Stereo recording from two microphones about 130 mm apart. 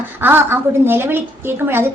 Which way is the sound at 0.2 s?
15° right (ahead or behind).